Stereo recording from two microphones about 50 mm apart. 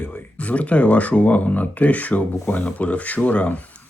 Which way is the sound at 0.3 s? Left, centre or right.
Left.